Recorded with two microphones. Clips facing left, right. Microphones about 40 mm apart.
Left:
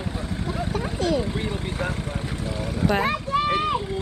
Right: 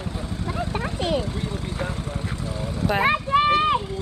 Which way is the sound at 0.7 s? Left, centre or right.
Right.